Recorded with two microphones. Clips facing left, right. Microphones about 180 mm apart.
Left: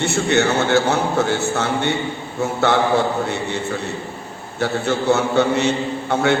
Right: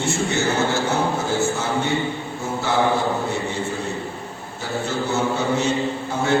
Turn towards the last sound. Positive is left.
turn(degrees=70)  # may be behind; listen again after turning